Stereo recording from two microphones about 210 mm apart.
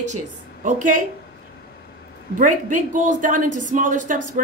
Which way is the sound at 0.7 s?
40° right (ahead or behind).